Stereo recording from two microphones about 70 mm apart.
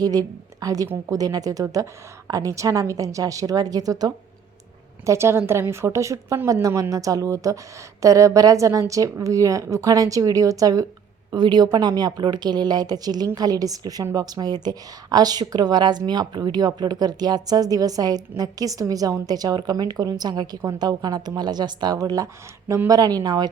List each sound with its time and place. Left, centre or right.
0.0 s a woman's voice: right
5.0 s speech: right
6.5 s a woman's voice: right
11.3 s a woman's voice: right